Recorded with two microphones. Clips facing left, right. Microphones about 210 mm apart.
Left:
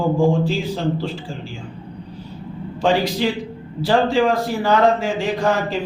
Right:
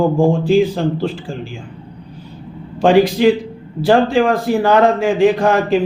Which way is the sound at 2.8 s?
55° right (ahead or behind).